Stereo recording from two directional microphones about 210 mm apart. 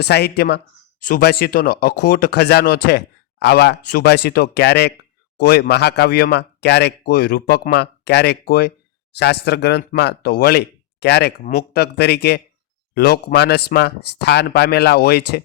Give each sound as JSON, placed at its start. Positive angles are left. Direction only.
{"t": 0.0, "sound": "speech", "side_deg": 50}